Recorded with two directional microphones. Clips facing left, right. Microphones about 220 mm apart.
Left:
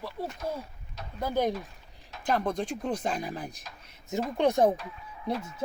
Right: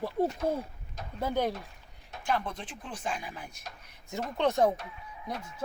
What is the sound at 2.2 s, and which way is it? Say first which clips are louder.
Speech: left 5 dB; 40° left (ahead or behind).